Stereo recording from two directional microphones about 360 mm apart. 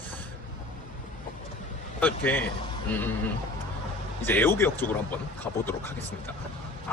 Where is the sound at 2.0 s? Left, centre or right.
Centre.